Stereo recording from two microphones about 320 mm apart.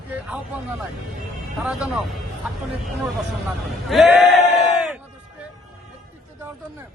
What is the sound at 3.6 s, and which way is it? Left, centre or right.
Speech, centre.